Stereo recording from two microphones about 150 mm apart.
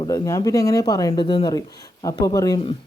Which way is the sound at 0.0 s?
25° left (ahead or behind).